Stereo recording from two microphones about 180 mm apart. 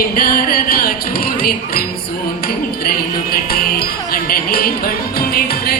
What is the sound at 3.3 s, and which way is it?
Music, 55° left (ahead or behind).